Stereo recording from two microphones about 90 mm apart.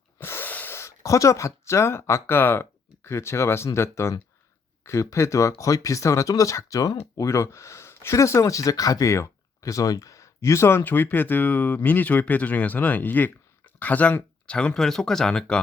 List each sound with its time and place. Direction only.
0.2 s speech: 25° left (ahead or behind)